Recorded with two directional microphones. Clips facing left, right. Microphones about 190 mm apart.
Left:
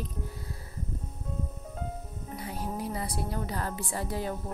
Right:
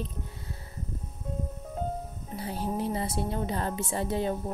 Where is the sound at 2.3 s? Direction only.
30° right (ahead or behind).